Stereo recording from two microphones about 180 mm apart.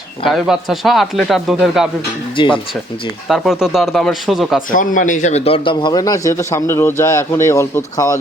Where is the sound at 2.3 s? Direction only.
30° left (ahead or behind).